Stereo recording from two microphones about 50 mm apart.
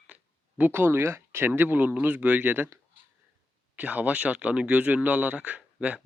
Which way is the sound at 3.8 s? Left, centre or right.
Right.